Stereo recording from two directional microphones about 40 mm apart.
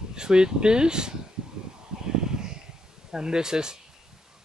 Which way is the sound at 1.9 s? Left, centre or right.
Centre.